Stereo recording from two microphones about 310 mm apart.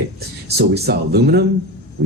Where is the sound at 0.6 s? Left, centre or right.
Right.